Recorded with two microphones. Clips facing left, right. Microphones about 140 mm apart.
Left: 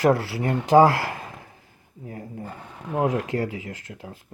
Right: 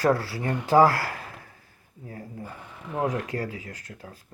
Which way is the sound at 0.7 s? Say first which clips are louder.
Left 3 dB; 20° left (ahead or behind).